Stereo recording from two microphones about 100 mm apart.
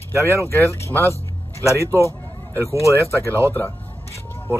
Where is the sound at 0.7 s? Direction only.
25° left (ahead or behind).